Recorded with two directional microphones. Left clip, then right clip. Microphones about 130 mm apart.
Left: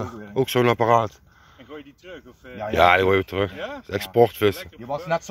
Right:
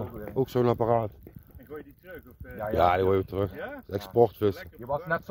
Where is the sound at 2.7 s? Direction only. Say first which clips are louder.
Left 7 dB; 20° right (ahead or behind).